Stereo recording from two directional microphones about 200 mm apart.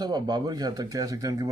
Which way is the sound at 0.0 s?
20° right (ahead or behind).